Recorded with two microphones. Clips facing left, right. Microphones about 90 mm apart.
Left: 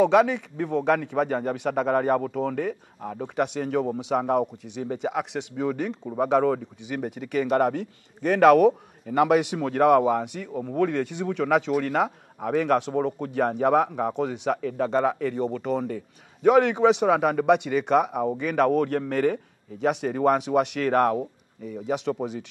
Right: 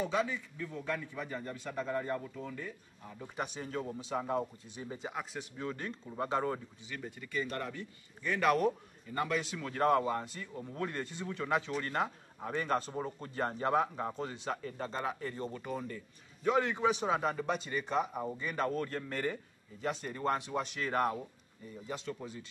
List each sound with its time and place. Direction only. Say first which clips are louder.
0.0 s speech: left 14 dB; 75° left (ahead or behind)
21.6 s speech: left 14 dB; 75° left (ahead or behind)